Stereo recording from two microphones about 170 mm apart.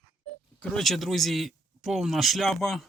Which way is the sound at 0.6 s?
5° left (ahead or behind).